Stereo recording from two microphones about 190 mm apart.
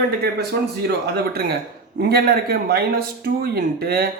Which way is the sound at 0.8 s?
55° right (ahead or behind).